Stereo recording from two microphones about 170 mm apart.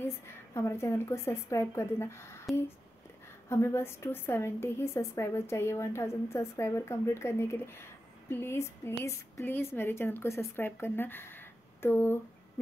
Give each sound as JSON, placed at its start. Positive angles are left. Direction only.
{"t": 0.6, "sound": "a woman's voice", "side_deg": 15}
{"t": 3.4, "sound": "a woman's voice", "side_deg": 15}